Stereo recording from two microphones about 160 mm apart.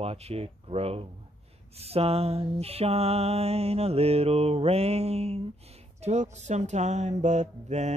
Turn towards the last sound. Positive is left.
turn(degrees=-45)  # may be behind; listen again after turning